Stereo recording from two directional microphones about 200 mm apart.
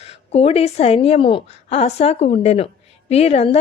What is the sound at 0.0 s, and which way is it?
Speech, 30° left (ahead or behind).